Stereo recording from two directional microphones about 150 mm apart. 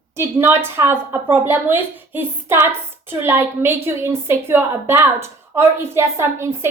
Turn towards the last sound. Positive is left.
turn(degrees=-15)  # may be behind; listen again after turning